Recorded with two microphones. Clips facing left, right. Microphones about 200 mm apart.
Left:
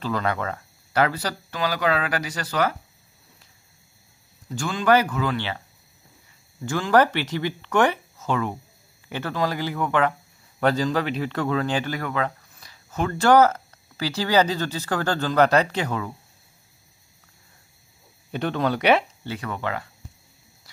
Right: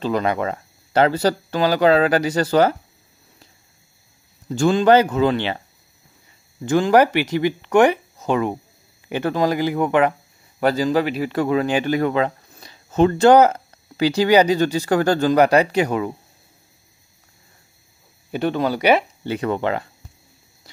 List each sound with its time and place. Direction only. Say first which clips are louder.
0.0 s speech: right 5 dB; 20° right (ahead or behind)
4.6 s speech: right 6 dB; 25° right (ahead or behind)
6.6 s speech: right 5 dB; 20° right (ahead or behind)
10.6 s speech: right 4 dB; 5° right (ahead or behind)
18.3 s speech: right 3 dB; 5° right (ahead or behind)
19.2 s speech: right 8 dB; 20° right (ahead or behind)